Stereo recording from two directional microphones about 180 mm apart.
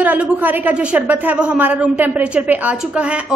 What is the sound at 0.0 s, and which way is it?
Speech, 10° right (ahead or behind).